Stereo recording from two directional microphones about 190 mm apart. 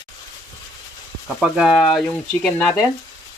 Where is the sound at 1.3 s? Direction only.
Centre (ahead or behind).